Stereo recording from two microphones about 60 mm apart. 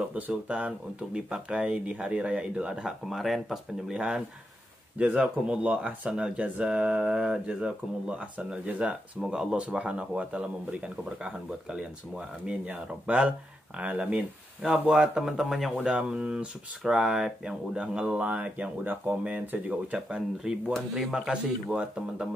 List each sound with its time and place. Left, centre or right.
0.1 s speech: centre
3.1 s speech: centre
3.9 s speech: centre
15.8 s speech: centre